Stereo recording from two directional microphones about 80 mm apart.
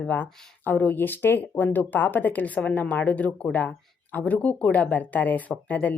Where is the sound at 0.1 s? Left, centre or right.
Left.